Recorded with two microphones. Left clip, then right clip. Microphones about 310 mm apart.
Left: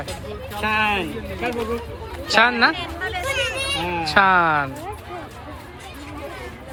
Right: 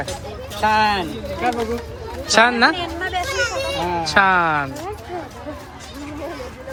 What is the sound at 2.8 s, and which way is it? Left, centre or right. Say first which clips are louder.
Speech: right 3 dB; right.